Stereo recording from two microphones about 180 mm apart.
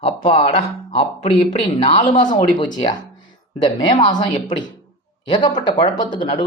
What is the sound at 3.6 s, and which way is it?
Speech, 25° left (ahead or behind).